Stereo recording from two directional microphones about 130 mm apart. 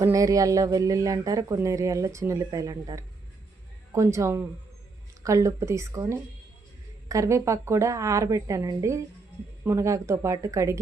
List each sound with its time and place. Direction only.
0.0 s speech: 25° right (ahead or behind)